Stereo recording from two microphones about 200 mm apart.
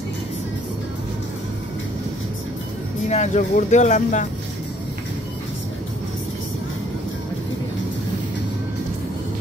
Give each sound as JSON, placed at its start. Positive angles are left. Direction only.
{"t": 3.1, "sound": "speech", "side_deg": 35}